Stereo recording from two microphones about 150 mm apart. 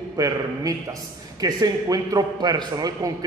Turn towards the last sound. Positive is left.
turn(degrees=-25)  # may be behind; listen again after turning